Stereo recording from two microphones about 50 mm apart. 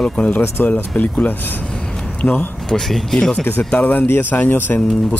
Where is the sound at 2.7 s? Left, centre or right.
Centre.